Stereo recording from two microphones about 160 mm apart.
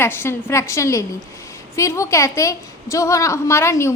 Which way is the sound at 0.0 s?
15° left (ahead or behind).